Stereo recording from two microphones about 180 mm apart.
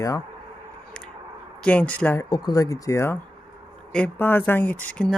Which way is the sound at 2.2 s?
20° left (ahead or behind).